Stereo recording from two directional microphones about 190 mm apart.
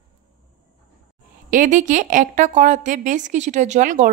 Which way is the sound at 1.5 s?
45° right (ahead or behind).